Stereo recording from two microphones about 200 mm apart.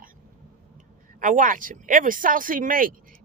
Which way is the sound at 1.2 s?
40° right (ahead or behind).